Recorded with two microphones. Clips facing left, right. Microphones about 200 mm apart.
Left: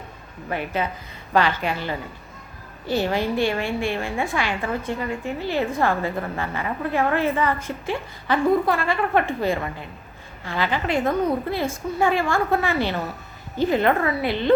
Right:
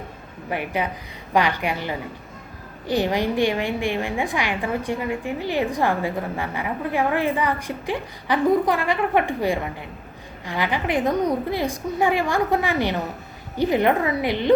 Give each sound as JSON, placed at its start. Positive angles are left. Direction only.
{"t": 0.5, "sound": "a woman's voice", "side_deg": -15}